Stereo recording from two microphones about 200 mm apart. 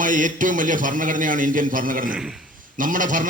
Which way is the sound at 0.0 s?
40° right (ahead or behind).